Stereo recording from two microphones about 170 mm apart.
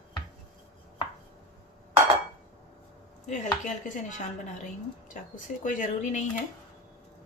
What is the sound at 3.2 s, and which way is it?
Speech, 45° left (ahead or behind).